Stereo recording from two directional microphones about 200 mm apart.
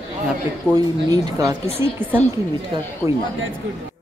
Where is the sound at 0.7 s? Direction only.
20° right (ahead or behind).